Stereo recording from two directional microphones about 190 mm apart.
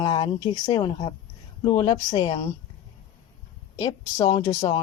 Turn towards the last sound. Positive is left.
turn(degrees=20)  # may be behind; listen again after turning